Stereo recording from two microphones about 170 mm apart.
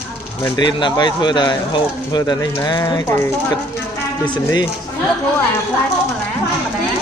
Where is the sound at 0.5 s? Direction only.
25° left (ahead or behind).